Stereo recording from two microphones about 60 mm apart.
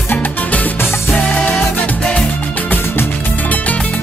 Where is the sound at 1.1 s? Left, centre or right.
Centre.